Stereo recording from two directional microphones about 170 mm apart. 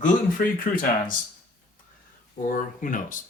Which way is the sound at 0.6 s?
55° left (ahead or behind).